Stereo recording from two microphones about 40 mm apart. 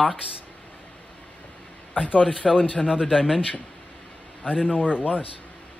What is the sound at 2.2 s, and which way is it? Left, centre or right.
Speech, centre.